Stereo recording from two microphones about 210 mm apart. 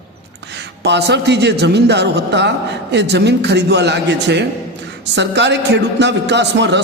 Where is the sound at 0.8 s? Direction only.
55° right (ahead or behind).